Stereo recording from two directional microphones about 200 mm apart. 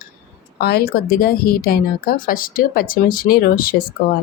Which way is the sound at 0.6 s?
50° left (ahead or behind).